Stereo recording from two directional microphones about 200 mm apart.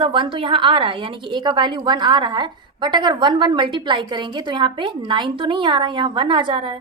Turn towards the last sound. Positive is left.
turn(degrees=-25)  # may be behind; listen again after turning